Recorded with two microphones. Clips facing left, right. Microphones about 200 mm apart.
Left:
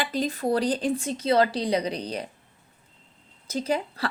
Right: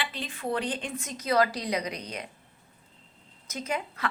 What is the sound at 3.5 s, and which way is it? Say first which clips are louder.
Speech: left 6 dB; 30° left (ahead or behind).